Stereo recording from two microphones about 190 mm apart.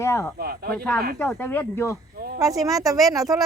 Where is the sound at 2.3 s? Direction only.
20° right (ahead or behind).